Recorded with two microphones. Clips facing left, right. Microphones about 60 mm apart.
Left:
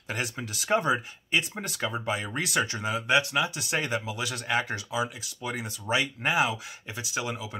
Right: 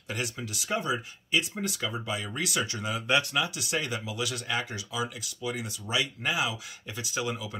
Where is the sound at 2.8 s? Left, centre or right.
Left.